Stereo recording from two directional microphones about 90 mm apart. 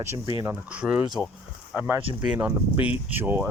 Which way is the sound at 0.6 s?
15° right (ahead or behind).